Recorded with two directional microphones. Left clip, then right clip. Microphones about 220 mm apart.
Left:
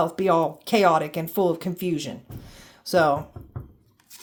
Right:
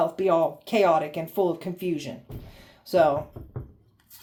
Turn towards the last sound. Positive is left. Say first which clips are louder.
# left 1 dB
turn(degrees=45)  # may be behind; listen again after turning